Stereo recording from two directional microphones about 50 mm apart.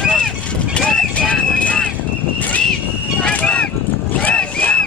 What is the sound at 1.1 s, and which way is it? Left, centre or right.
Horse, left.